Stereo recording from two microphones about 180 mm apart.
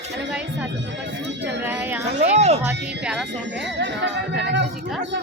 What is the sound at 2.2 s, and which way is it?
Music, 35° right (ahead or behind).